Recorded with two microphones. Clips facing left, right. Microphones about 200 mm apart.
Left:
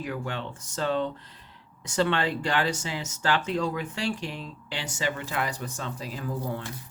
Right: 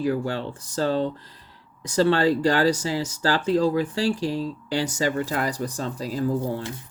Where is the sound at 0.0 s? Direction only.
35° right (ahead or behind).